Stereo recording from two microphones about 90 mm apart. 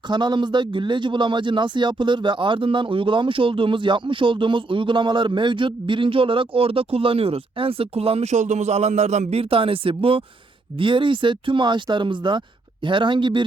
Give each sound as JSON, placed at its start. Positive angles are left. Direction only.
{"t": 0.1, "sound": "speech", "side_deg": -60}
{"t": 9.3, "sound": "speech", "side_deg": -90}
{"t": 10.8, "sound": "speech", "side_deg": -65}